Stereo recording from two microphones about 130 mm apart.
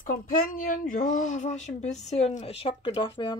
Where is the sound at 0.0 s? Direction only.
90° left.